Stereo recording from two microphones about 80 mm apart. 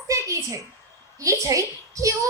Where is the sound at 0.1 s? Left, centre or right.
Right.